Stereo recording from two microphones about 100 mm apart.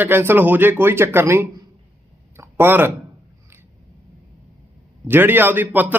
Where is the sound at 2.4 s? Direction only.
20° right (ahead or behind).